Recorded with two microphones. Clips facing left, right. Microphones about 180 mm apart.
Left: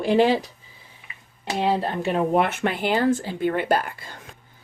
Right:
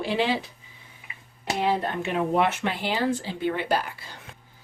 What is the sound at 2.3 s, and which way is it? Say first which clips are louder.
Speech: left 2 dB; 50° left (ahead or behind).